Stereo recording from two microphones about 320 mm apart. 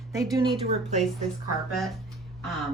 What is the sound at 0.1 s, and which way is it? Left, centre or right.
Speech, centre.